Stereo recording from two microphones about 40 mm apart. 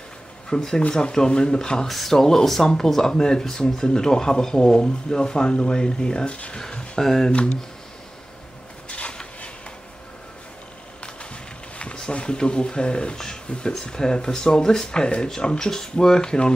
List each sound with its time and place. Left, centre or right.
0.5 s speech: centre
1.9 s speech: centre; by 6.9 s left
7.0 s speech: centre
8.8 s a sound: left
11.8 s speech: left